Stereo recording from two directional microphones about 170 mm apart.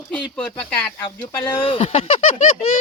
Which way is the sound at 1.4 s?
30° left (ahead or behind).